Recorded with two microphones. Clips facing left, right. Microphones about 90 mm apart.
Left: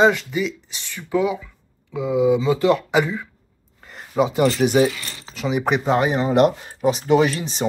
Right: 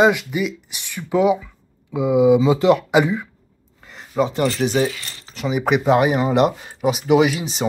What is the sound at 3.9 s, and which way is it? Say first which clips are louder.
Speech: even; 5° left (ahead or behind).